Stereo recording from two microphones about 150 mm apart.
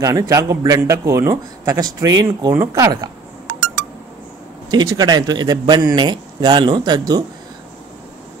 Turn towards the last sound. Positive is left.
turn(degrees=-25)  # may be behind; listen again after turning